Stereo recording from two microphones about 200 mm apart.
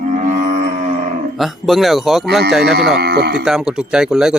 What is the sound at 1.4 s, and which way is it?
Speech, centre (ahead or behind).